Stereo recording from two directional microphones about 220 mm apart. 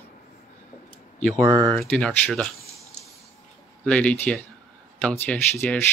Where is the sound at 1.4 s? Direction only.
15° right (ahead or behind).